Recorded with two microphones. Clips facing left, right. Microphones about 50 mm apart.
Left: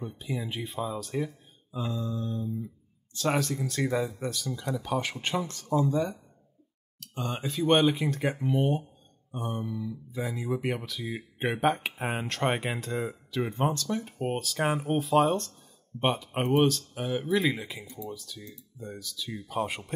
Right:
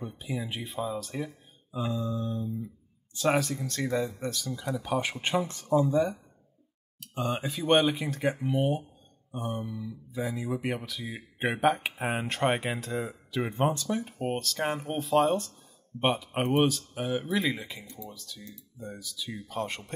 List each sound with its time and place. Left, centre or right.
0.0 s speech: centre
5.2 s speech: centre
7.0 s speech: centre
13.3 s speech: centre
19.4 s speech: centre